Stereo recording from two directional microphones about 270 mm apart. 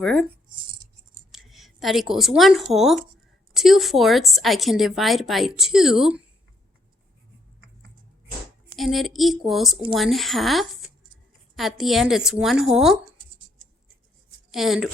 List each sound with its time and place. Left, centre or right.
0.0 s a woman's voice: centre
0.4 s scissors: centre
1.3 s a woman's voice: centre
8.7 s a woman's voice: centre
14.5 s a woman's voice: centre